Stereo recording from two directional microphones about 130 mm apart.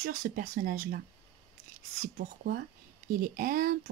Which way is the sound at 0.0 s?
75° right (ahead or behind).